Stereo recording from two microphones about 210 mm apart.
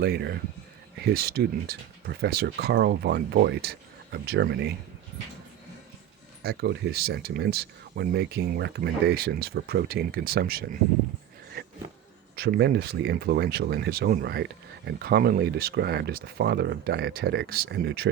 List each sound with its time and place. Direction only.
0.0 s speech: 50° right (ahead or behind)
6.4 s speech: 50° right (ahead or behind)
12.4 s speech: 50° right (ahead or behind)